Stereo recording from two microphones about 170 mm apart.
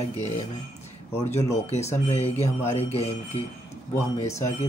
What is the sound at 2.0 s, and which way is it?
Speech, 40° left (ahead or behind).